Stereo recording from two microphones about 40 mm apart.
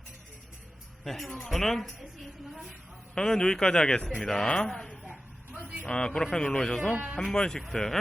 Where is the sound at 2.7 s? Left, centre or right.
Centre.